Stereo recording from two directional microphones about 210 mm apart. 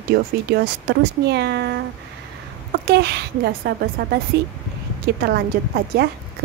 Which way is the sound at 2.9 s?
50° right (ahead or behind).